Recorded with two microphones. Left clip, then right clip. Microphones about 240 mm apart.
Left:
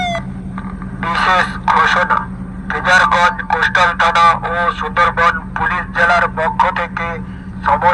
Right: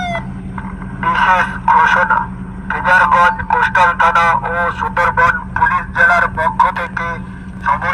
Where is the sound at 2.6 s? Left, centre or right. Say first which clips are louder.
Right 1 dB; centre.